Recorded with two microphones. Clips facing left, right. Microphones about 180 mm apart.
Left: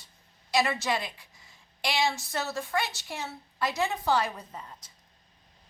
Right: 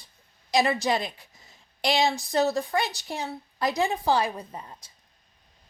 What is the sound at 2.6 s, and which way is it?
Speech, 35° right (ahead or behind).